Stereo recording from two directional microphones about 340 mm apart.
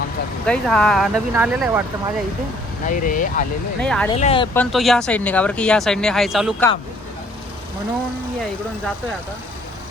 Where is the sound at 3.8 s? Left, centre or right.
Centre.